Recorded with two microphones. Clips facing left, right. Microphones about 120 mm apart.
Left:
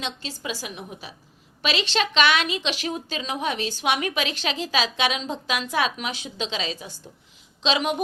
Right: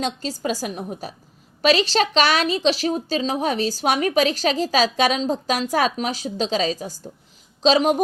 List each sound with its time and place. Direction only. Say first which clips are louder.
0.0 s a woman's voice: right 7 dB; 40° right (ahead or behind)